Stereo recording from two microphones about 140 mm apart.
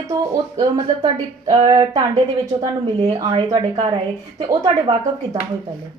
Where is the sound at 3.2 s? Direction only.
40° right (ahead or behind).